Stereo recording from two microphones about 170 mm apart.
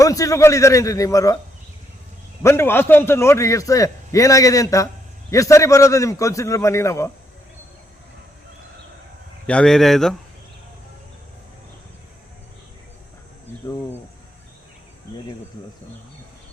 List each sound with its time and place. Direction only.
0.0 s a man's voice: 20° left (ahead or behind)
2.4 s a man's voice: 15° left (ahead or behind)
9.5 s speech: 5° left (ahead or behind)